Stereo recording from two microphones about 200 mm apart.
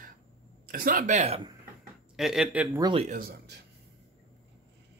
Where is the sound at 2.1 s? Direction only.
Centre (ahead or behind).